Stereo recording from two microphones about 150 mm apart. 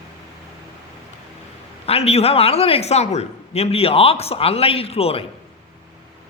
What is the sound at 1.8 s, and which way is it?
A man's voice, 40° left (ahead or behind).